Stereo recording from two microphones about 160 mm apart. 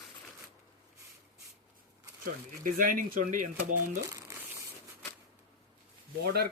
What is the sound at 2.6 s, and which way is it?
Speech, 60° right (ahead or behind).